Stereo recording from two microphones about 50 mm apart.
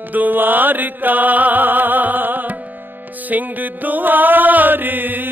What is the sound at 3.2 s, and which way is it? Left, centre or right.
Mantra, right.